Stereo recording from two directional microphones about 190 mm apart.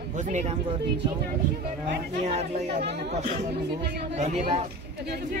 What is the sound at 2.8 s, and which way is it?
Speech, 60° right (ahead or behind).